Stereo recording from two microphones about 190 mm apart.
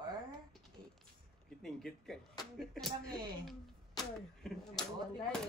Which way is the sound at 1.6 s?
Centre (ahead or behind).